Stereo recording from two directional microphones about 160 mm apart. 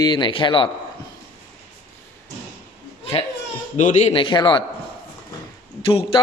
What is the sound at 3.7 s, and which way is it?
Speech, 50° left (ahead or behind).